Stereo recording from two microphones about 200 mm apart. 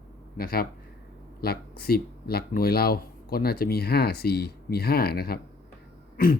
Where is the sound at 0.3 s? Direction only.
50° left (ahead or behind).